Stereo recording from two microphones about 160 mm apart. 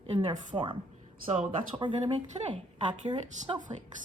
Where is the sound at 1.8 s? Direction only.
30° right (ahead or behind).